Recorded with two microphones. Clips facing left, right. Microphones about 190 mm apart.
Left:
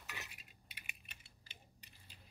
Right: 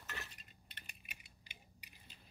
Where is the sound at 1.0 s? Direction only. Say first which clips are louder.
Right 3 dB; 15° right (ahead or behind).